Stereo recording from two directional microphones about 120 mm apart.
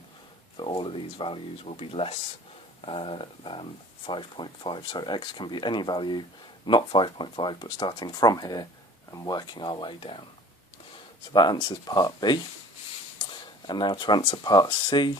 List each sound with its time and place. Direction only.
0.5 s speech: 40° left (ahead or behind)
11.3 s speech: 40° left (ahead or behind)
13.7 s speech: 40° left (ahead or behind)